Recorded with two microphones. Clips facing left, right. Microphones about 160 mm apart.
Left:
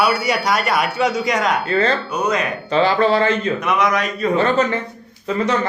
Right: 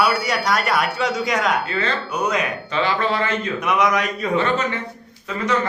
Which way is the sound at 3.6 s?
15° right (ahead or behind).